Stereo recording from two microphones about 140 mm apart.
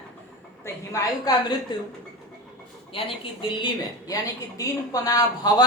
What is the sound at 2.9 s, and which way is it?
Speech, 40° left (ahead or behind).